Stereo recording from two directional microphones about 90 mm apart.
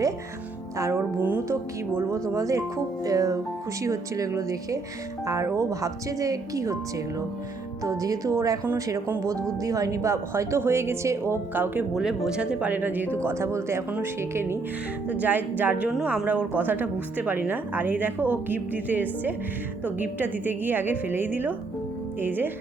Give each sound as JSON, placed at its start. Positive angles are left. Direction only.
{"t": 0.8, "sound": "speech", "side_deg": -35}
{"t": 7.9, "sound": "speech", "side_deg": -40}
{"t": 9.6, "sound": "speech", "side_deg": -40}
{"t": 11.9, "sound": "speech", "side_deg": -5}
{"t": 13.2, "sound": "speech", "side_deg": -30}
{"t": 15.0, "sound": "speech", "side_deg": -15}